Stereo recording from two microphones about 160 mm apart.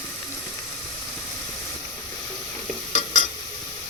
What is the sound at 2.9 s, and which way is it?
Stir, 50° left (ahead or behind).